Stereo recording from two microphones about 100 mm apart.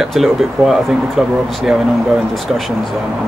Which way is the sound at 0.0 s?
Centre (ahead or behind).